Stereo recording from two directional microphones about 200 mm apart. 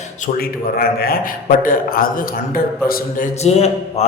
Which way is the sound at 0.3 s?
50° left (ahead or behind).